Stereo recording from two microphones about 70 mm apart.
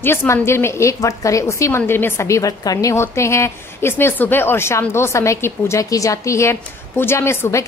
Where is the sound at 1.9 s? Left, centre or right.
Left.